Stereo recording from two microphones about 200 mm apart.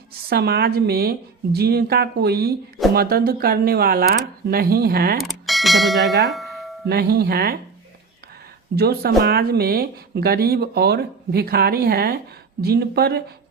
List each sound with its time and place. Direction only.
0.3 s speech: 55° right (ahead or behind)
5.1 s speech: centre (ahead or behind)
6.8 s speech: 50° right (ahead or behind)
8.7 s speech: 50° right (ahead or behind)